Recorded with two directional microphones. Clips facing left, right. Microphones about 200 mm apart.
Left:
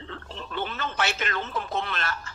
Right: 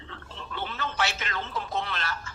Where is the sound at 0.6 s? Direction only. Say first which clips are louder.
Left 1 dB; 55° left (ahead or behind).